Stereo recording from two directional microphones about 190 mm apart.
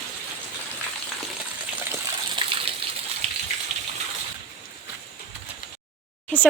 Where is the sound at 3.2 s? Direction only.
35° right (ahead or behind).